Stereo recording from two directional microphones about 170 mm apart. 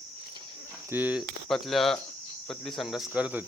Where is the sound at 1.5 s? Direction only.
Centre (ahead or behind).